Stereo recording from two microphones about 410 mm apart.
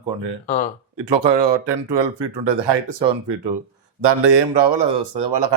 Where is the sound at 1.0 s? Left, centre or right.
Right.